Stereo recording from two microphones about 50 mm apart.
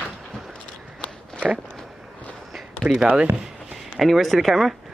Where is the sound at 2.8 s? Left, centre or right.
Right.